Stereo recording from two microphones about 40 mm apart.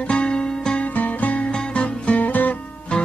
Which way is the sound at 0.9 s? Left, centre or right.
Left.